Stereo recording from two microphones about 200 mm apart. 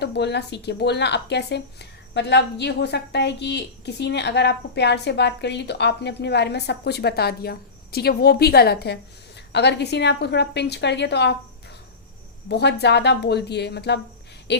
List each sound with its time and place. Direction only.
0.0 s speech: 60° left (ahead or behind)
12.5 s speech: 55° left (ahead or behind)